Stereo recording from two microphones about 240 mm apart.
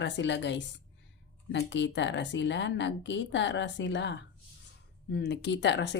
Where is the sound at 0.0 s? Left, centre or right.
Left.